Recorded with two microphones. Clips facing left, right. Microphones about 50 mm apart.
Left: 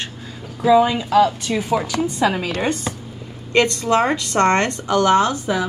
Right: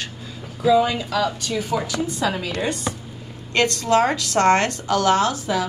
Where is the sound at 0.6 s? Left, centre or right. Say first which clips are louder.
Left 3 dB; left.